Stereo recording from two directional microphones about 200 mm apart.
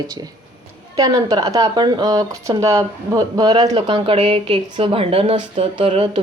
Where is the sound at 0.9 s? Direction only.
15° right (ahead or behind).